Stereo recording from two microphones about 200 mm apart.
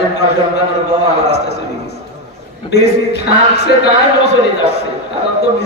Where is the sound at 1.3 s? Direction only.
55° left (ahead or behind).